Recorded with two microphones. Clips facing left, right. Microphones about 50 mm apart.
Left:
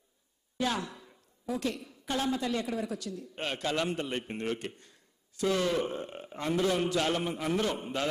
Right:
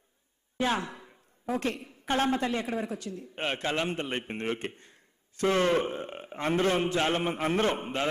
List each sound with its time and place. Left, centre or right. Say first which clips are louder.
0.6 s a woman's voice: right 3 dB; right